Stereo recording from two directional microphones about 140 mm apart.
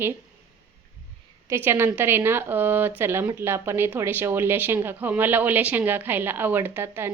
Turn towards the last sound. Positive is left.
turn(degrees=-15)  # may be behind; listen again after turning